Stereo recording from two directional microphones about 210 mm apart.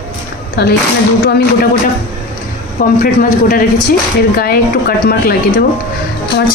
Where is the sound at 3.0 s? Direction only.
40° left (ahead or behind).